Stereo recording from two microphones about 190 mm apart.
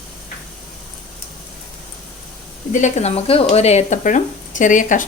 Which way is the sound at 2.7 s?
40° left (ahead or behind).